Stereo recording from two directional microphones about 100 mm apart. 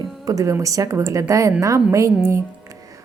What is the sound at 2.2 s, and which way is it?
Music, 30° right (ahead or behind).